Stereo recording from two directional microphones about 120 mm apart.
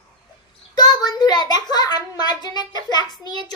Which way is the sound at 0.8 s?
35° left (ahead or behind).